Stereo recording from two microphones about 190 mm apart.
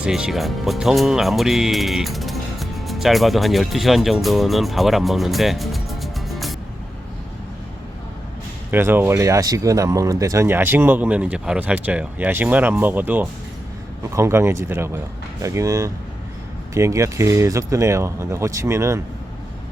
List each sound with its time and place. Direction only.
0.0 s speech: 5° right (ahead or behind)
8.7 s speech: 10° right (ahead or behind)